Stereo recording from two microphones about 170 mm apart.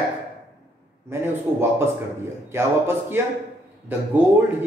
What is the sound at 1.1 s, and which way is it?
Speech, 15° right (ahead or behind).